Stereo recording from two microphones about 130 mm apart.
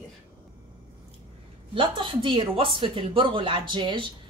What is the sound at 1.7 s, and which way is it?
Speech, 40° right (ahead or behind).